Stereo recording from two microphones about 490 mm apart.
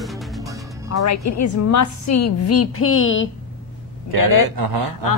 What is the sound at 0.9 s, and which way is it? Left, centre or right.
A woman's voice, left.